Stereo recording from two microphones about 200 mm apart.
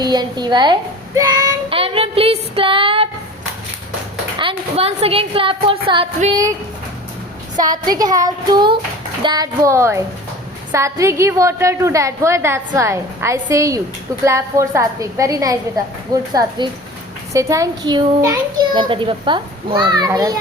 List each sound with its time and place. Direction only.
0.0 s child singing: 20° right (ahead or behind)
4.4 s a child's voice: 25° right (ahead or behind)
7.9 s a child's voice: 20° right (ahead or behind)